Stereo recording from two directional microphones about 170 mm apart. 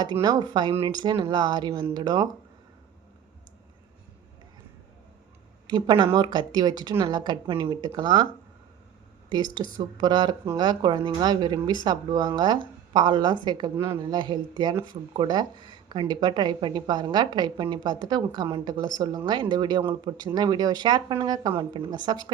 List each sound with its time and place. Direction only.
0.0 s speech: 25° right (ahead or behind)
5.6 s speech: 25° right (ahead or behind)
9.7 s speech: 25° right (ahead or behind)
13.7 s speech: 15° right (ahead or behind)